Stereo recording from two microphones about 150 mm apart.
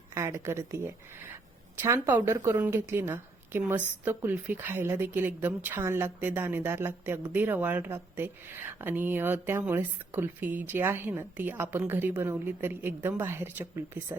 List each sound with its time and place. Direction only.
0.1 s a woman's voice: 20° right (ahead or behind)